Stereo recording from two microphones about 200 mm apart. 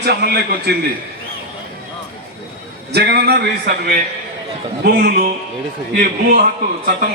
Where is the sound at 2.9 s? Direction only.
55° right (ahead or behind).